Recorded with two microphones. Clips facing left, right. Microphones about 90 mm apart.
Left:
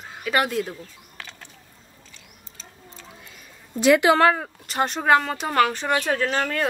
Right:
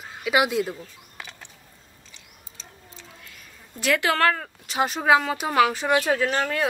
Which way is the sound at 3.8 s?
20° left (ahead or behind).